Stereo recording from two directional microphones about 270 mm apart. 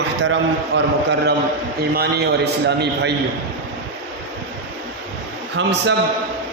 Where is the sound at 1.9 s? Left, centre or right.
Right.